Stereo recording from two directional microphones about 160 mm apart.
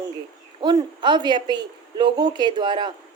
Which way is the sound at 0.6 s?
25° right (ahead or behind).